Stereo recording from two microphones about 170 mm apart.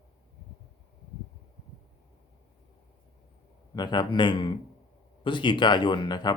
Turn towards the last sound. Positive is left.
turn(degrees=25)  # may be behind; listen again after turning